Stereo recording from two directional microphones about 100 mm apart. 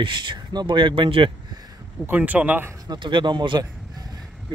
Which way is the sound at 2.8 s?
50° right (ahead or behind).